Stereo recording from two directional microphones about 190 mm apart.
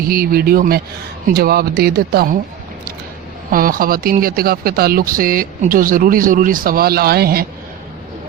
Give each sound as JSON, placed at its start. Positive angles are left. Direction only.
{"t": 0.0, "sound": "speech", "side_deg": -50}
{"t": 3.5, "sound": "speech", "side_deg": -50}